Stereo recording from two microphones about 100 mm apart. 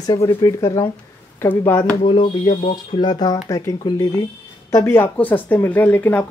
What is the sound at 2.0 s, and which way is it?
Speech, 60° left (ahead or behind).